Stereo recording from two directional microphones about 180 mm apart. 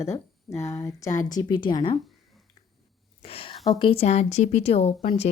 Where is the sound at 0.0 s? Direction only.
15° left (ahead or behind).